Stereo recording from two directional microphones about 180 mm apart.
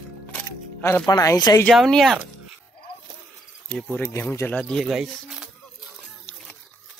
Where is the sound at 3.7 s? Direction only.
5° left (ahead or behind).